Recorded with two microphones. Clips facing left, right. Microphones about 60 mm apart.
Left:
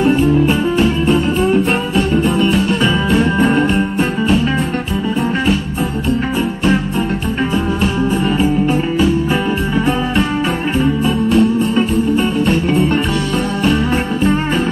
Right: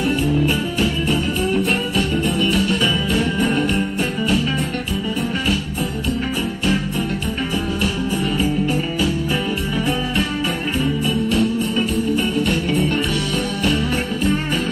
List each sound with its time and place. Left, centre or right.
0.0 s music: left
8.4 s music: left